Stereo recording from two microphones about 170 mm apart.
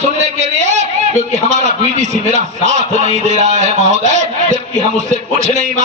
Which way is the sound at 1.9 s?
45° right (ahead or behind).